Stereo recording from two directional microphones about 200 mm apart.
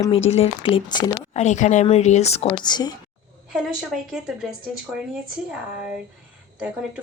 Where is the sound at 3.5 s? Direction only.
Centre (ahead or behind).